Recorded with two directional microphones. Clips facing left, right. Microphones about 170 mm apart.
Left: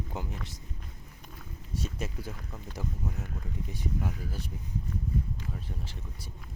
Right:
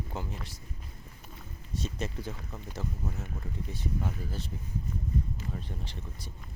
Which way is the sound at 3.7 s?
10° left (ahead or behind).